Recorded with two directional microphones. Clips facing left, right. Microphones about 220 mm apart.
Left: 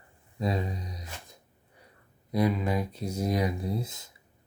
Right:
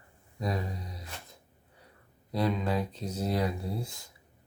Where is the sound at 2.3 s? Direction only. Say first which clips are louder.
Left 2 dB; 10° left (ahead or behind).